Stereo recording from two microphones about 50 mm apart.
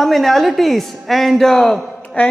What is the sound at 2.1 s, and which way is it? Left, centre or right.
Speech, left.